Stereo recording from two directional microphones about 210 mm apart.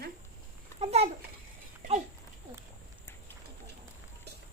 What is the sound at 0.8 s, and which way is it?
Speech, 30° right (ahead or behind).